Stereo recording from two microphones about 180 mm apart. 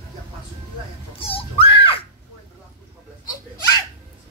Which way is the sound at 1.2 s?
30° left (ahead or behind).